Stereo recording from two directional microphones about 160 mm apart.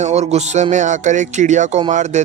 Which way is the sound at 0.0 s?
45° right (ahead or behind).